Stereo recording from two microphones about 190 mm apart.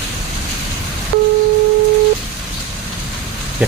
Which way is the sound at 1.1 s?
65° right (ahead or behind).